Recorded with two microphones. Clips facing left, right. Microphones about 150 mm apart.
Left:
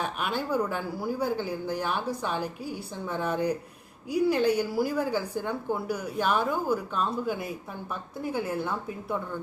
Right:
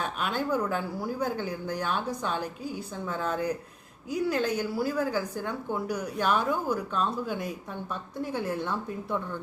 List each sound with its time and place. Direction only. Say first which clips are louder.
0.0 s a woman's voice: even; 10° left (ahead or behind)